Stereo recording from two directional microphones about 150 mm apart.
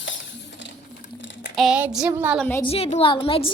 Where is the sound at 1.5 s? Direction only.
5° right (ahead or behind).